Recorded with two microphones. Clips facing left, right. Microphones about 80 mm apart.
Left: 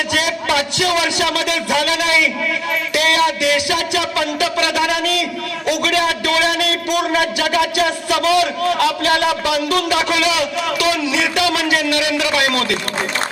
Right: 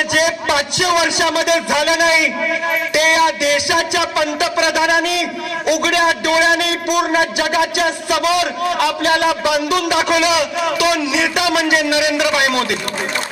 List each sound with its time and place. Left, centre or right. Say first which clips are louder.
0.1 s a man's voice: right 2 dB; centre